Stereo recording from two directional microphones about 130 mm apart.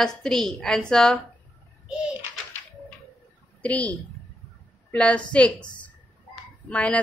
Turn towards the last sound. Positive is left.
turn(degrees=10)  # may be behind; listen again after turning